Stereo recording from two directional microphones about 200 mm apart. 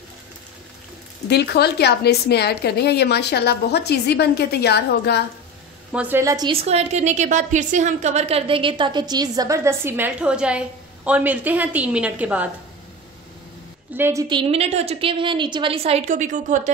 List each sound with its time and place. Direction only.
1.3 s a woman's voice: 55° left (ahead or behind)
5.9 s a woman's voice: 10° right (ahead or behind)
13.9 s a woman's voice: 10° right (ahead or behind)
14.3 s a woman's voice: 30° right (ahead or behind)